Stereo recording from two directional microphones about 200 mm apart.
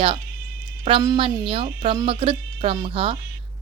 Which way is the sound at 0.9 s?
25° right (ahead or behind).